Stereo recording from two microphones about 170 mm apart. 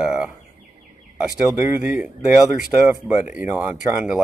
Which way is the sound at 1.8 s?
10° right (ahead or behind).